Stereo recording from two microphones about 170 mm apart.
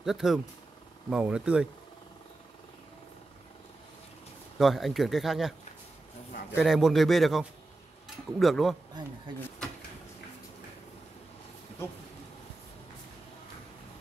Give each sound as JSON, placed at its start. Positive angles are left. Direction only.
{"t": 0.0, "sound": "speech", "side_deg": 0}
{"t": 4.6, "sound": "speech", "side_deg": 0}
{"t": 6.5, "sound": "speech", "side_deg": 0}